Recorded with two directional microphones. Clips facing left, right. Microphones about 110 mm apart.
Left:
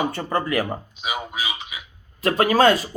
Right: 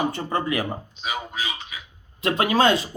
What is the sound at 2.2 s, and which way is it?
Speech, 40° left (ahead or behind).